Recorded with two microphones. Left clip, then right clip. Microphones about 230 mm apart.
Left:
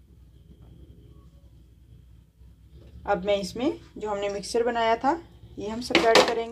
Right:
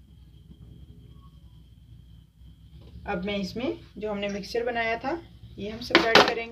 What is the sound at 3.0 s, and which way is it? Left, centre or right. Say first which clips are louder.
Speech: left 6 dB; left.